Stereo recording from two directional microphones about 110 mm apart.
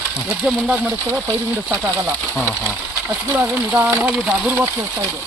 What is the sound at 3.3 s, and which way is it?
Speech, 15° right (ahead or behind).